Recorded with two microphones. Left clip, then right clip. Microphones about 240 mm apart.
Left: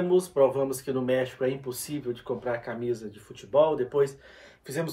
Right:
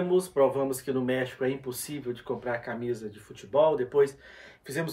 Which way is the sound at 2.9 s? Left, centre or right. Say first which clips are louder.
Left 2 dB; left.